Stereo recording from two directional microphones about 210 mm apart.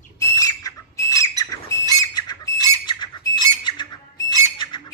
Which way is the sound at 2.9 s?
20° left (ahead or behind).